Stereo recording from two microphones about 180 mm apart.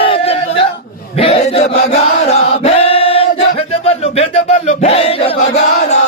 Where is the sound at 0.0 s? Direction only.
30° left (ahead or behind).